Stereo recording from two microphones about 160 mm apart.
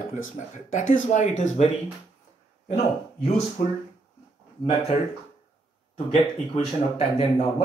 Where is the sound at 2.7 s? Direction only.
40° left (ahead or behind).